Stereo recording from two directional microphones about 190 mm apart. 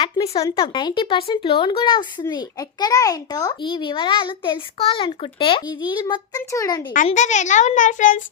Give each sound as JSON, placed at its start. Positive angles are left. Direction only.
{"t": 0.0, "sound": "a child's voice", "side_deg": 20}
{"t": 6.9, "sound": "a woman's voice", "side_deg": 40}